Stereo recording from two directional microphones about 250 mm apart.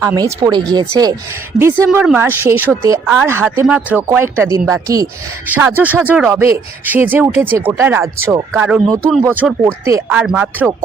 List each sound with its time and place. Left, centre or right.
0.0 s speech: centre